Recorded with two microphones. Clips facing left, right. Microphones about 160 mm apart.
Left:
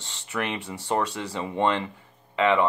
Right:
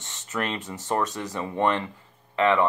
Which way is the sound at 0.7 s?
15° left (ahead or behind).